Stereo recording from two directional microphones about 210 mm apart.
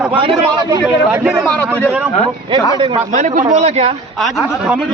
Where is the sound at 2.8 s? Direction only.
35° right (ahead or behind).